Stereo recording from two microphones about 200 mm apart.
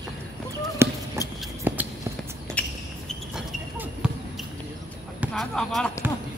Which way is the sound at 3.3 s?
5° right (ahead or behind).